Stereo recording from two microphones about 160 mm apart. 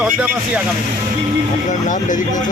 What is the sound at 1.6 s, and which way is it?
Speech, 50° left (ahead or behind).